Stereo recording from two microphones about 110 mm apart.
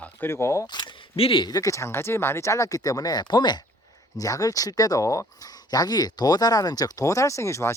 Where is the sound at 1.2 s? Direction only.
60° left (ahead or behind).